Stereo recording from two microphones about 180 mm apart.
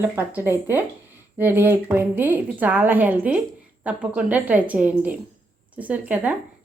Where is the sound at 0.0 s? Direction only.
10° right (ahead or behind).